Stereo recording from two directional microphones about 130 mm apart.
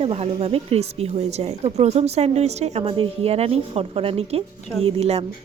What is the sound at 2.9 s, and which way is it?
A woman's voice, 45° right (ahead or behind).